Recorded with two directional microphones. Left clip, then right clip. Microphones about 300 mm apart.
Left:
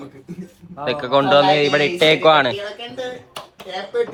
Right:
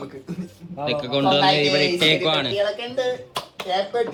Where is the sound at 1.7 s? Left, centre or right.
Centre.